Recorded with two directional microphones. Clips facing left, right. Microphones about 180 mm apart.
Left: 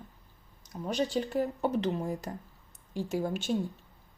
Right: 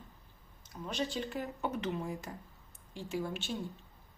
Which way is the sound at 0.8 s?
40° left (ahead or behind).